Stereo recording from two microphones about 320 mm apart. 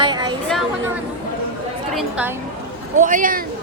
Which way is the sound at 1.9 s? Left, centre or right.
Centre.